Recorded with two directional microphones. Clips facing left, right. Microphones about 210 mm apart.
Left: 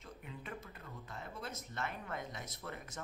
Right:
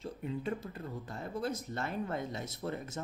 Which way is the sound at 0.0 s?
30° right (ahead or behind).